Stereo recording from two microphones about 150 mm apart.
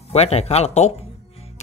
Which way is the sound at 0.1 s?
45° left (ahead or behind).